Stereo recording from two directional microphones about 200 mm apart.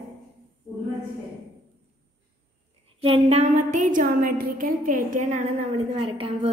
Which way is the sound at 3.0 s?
30° right (ahead or behind).